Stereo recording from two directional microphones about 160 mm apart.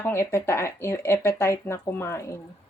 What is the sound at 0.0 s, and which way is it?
Speech, 15° left (ahead or behind).